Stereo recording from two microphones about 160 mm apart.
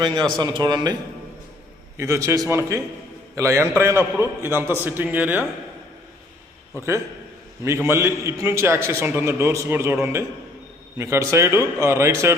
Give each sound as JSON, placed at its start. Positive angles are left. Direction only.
{"t": 0.0, "sound": "a man's voice", "side_deg": -25}
{"t": 2.0, "sound": "a man's voice", "side_deg": -20}
{"t": 7.6, "sound": "a man's voice", "side_deg": -15}